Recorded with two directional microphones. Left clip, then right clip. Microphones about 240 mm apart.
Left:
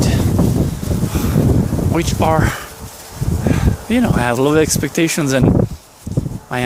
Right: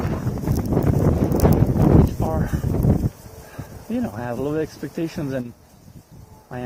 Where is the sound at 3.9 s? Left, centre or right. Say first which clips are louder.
Left 10 dB; centre.